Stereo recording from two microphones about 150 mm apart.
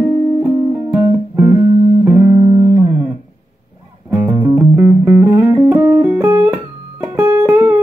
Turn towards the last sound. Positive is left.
turn(degrees=-20)  # may be behind; listen again after turning